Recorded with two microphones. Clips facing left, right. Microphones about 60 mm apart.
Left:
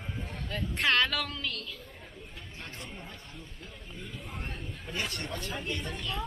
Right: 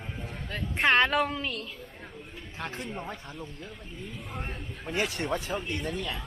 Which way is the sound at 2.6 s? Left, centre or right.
Right.